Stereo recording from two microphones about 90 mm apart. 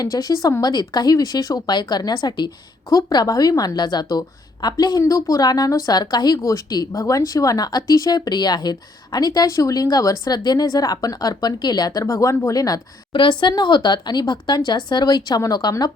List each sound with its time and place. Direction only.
0.0 s speech: 45° left (ahead or behind)
2.9 s speech: 45° left (ahead or behind)
5.0 s a woman's voice: 40° left (ahead or behind)
13.1 s a woman's voice: 65° left (ahead or behind)
13.5 s speech: 55° left (ahead or behind)